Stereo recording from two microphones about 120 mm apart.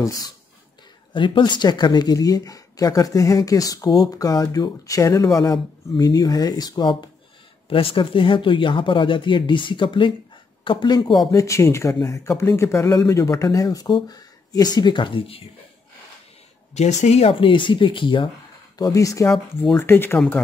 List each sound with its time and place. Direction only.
0.0 s speech: 30° left (ahead or behind)
1.1 s speech: 45° left (ahead or behind)
11.2 s speech: 25° left (ahead or behind); by 15.4 s 50° left (ahead or behind)
16.7 s speech: 70° left (ahead or behind); by 18.3 s 45° left (ahead or behind)
18.8 s speech: 30° left (ahead or behind)